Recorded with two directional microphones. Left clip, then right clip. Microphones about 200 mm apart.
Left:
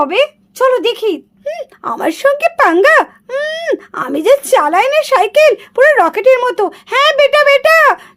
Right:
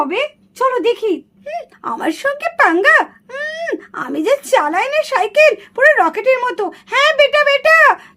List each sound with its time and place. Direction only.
0.1 s speech: 55° left (ahead or behind)
1.5 s speech: 30° left (ahead or behind)